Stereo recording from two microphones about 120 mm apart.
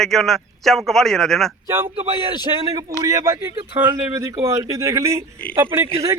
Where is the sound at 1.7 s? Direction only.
20° right (ahead or behind).